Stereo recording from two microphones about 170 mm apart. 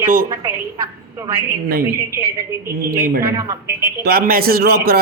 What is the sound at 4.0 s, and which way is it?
A man's voice, 65° right (ahead or behind).